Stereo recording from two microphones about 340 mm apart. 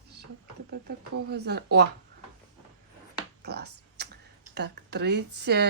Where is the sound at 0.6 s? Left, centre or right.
Right.